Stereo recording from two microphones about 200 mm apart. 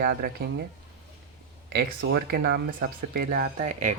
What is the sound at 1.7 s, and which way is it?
Speech, 50° right (ahead or behind).